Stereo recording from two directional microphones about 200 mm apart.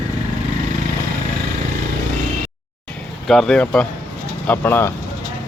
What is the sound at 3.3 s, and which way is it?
Speech, 5° left (ahead or behind).